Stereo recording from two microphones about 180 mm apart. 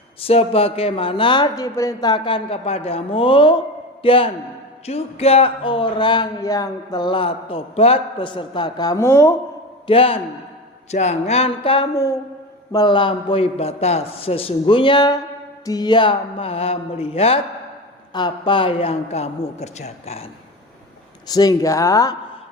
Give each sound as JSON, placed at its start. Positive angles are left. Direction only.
{"t": 0.2, "sound": "speech", "side_deg": 35}
{"t": 9.8, "sound": "a man's voice", "side_deg": 30}
{"t": 21.2, "sound": "speech", "side_deg": 20}